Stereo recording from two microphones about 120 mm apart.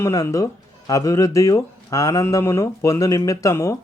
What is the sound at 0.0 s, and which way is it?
Speech, 25° left (ahead or behind).